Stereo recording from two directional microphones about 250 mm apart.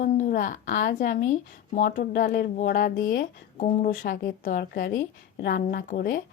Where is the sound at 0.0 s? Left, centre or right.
Left.